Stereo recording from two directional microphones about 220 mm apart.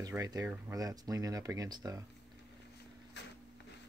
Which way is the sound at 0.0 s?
15° right (ahead or behind).